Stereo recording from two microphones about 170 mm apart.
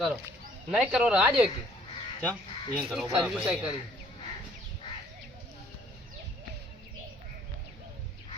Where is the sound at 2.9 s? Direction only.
Centre (ahead or behind).